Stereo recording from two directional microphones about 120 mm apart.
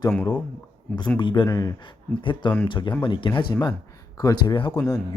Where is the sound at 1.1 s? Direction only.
40° left (ahead or behind).